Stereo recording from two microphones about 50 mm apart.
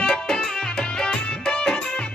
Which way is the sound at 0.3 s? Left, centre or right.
Centre.